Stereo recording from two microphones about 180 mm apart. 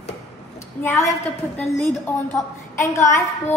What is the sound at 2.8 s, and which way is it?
Speech, 15° left (ahead or behind).